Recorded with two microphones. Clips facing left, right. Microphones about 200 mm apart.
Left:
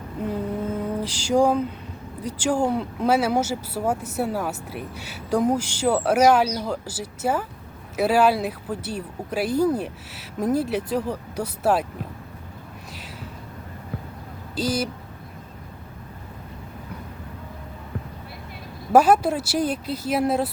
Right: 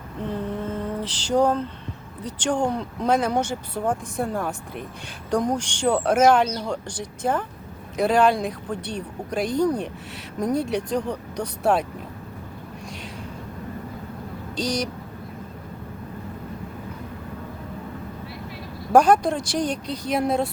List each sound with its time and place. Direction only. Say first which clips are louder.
0.3 s lullaby: left 1 dB; 10° left (ahead or behind)
2.2 s speech: left 1 dB; 5° left (ahead or behind)
14.5 s speech: left 1 dB; 5° left (ahead or behind)
18.9 s speech: even; 5° left (ahead or behind)